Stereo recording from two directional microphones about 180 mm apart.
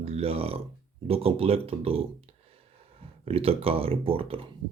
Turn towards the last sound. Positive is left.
turn(degrees=-30)  # may be behind; listen again after turning